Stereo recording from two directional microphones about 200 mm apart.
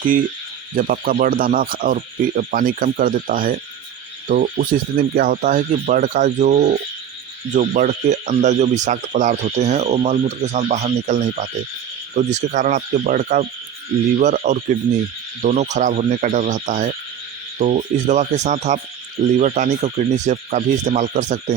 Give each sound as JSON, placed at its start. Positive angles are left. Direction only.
{"t": 0.8, "sound": "speech", "side_deg": -45}